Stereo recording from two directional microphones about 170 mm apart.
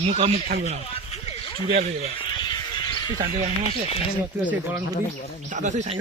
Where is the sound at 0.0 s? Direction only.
35° right (ahead or behind).